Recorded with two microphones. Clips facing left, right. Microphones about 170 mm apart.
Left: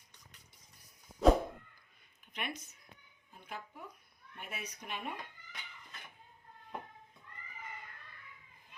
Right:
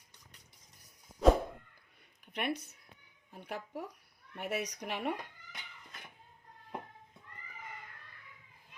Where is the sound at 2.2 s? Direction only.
60° right (ahead or behind).